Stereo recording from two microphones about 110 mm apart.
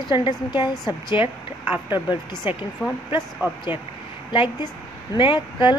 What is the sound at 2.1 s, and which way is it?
Speech, 40° left (ahead or behind).